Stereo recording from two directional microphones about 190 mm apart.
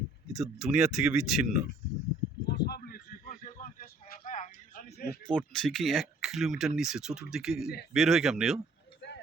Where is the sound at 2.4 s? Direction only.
60° left (ahead or behind).